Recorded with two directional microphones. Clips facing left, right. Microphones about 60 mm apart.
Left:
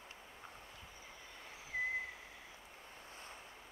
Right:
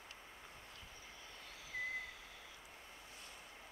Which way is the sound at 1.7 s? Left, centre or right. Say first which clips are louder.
Left 5 dB; left.